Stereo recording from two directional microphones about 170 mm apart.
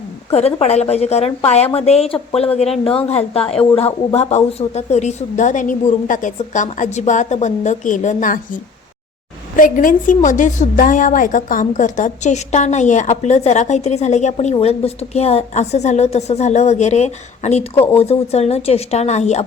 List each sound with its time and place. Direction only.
0.3 s a woman's voice: 40° left (ahead or behind)
9.6 s a woman's voice: 50° left (ahead or behind)